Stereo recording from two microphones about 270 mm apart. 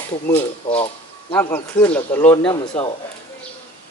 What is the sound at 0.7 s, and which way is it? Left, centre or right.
Bird, left.